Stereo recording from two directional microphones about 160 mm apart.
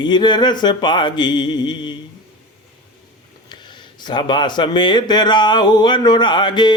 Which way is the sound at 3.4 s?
25° left (ahead or behind).